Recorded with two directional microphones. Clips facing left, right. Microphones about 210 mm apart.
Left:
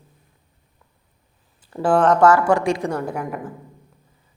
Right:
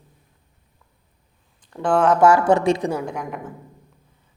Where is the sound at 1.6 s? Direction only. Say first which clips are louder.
Left 2 dB; 5° left (ahead or behind).